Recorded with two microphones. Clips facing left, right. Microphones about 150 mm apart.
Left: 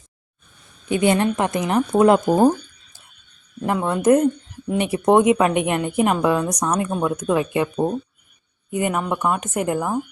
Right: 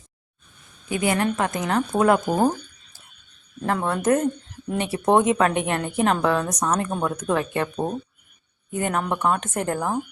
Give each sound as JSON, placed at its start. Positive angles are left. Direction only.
{"t": 0.9, "sound": "a woman's voice", "side_deg": 25}
{"t": 3.7, "sound": "a woman's voice", "side_deg": 15}